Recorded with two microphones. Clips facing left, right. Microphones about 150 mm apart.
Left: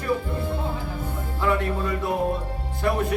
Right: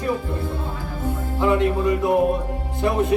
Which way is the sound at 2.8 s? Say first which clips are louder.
Right 4 dB; 20° right (ahead or behind).